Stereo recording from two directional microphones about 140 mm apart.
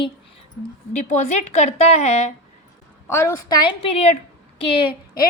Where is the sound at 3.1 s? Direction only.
25° left (ahead or behind).